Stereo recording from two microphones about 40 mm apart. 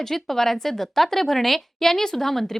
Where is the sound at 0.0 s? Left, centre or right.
Centre.